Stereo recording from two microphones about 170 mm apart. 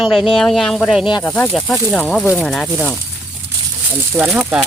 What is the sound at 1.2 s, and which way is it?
Speech, 10° left (ahead or behind).